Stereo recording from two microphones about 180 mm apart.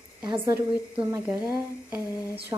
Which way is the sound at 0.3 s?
15° right (ahead or behind).